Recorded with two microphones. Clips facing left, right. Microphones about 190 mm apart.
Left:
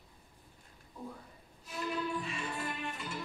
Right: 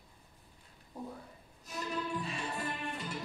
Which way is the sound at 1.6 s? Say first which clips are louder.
Left 2 dB; 40° right (ahead or behind).